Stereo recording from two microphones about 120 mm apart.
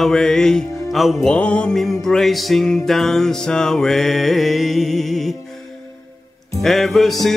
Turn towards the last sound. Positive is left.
turn(degrees=0)  # may be behind; listen again after turning